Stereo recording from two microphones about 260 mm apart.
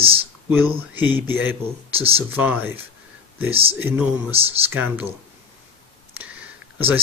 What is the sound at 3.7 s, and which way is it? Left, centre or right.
Speech, centre.